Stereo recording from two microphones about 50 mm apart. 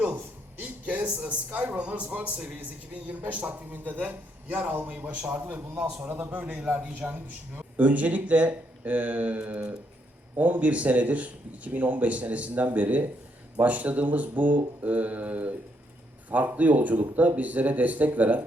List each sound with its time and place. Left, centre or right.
0.6 s a man's voice: right
6.5 s a man's voice: right